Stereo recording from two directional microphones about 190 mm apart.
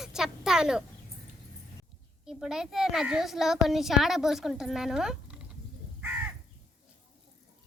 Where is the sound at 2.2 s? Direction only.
Centre (ahead or behind).